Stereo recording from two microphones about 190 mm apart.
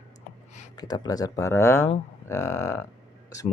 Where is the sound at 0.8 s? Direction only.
20° left (ahead or behind).